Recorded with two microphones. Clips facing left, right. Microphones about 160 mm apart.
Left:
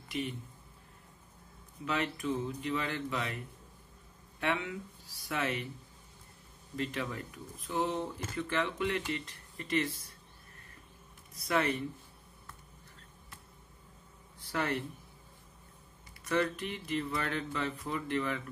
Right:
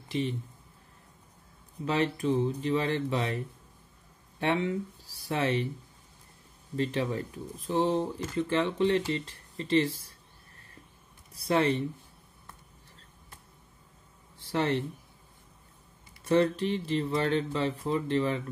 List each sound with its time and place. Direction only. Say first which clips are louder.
0.1 s speech: right 6 dB; 30° right (ahead or behind)
1.9 s speech: right 6 dB; 35° right (ahead or behind)
6.8 s speech: right 7 dB; 30° right (ahead or behind)
11.3 s speech: right 5 dB; 30° right (ahead or behind)
14.4 s speech: right 6 dB; 25° right (ahead or behind)
16.3 s speech: right 7 dB; 30° right (ahead or behind)